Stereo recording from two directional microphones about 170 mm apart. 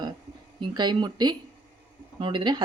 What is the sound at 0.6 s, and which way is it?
Speech, 25° right (ahead or behind).